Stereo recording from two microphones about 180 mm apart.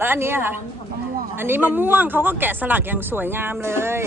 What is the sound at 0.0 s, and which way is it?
Speech, 10° right (ahead or behind).